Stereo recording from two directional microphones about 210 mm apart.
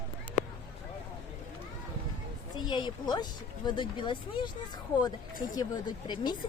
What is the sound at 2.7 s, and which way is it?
Speech, 20° left (ahead or behind).